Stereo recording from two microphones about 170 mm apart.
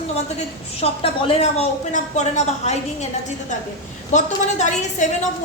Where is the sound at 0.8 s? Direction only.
35° left (ahead or behind).